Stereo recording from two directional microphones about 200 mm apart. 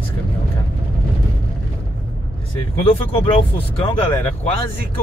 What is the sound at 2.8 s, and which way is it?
Speech, 30° left (ahead or behind).